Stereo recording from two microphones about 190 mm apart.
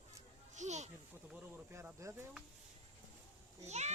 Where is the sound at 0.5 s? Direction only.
40° right (ahead or behind).